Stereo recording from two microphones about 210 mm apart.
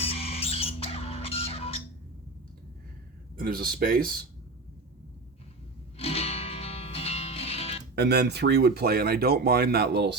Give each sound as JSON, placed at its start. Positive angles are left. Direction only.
{"t": 0.0, "sound": "music", "side_deg": 30}
{"t": 3.3, "sound": "speech", "side_deg": -45}
{"t": 6.0, "sound": "music", "side_deg": 30}
{"t": 7.9, "sound": "speech", "side_deg": -50}